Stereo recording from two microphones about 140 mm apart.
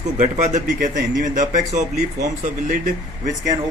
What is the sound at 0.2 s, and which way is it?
Speech, 60° right (ahead or behind).